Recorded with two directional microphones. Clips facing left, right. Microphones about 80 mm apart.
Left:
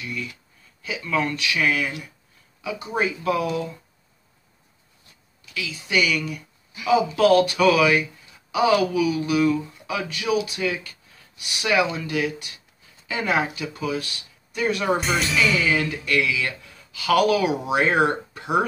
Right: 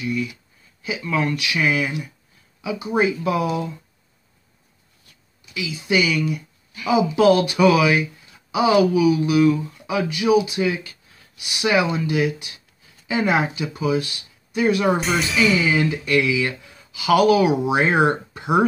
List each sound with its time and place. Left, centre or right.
0.0 s speech: centre
5.4 s speech: centre
15.0 s speech: centre